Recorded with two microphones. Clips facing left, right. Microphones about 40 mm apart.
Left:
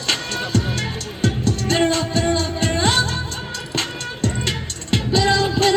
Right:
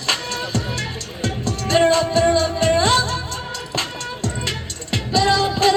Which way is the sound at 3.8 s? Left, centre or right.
Centre.